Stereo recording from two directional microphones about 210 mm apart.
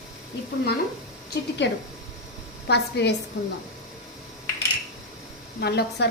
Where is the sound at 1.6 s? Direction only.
55° left (ahead or behind).